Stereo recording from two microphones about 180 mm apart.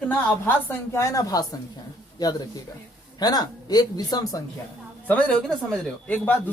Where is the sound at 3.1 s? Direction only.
20° left (ahead or behind).